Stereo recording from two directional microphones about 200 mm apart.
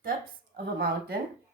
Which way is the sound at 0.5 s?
50° right (ahead or behind).